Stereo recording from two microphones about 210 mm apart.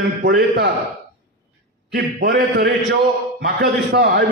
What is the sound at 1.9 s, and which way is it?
A man's voice, 50° right (ahead or behind).